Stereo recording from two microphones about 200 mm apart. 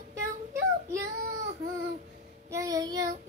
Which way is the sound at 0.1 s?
15° right (ahead or behind).